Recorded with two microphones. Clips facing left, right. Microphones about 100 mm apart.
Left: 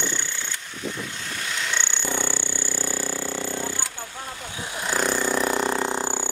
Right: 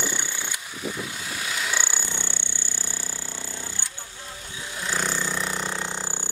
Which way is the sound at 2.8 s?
50° left (ahead or behind).